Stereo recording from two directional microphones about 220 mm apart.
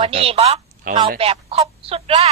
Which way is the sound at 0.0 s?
25° right (ahead or behind).